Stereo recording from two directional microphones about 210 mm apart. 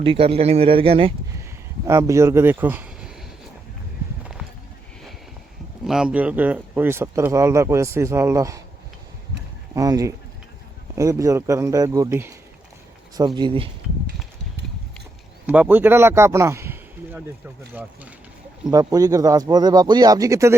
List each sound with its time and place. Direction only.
0.0 s speech: 25° right (ahead or behind)
1.9 s speech: 15° right (ahead or behind)
4.2 s clip-clop: centre (ahead or behind)
5.8 s speech: 5° right (ahead or behind)
9.7 s speech: 15° right (ahead or behind)
15.4 s speech: 10° right (ahead or behind)
18.7 s speech: 15° right (ahead or behind)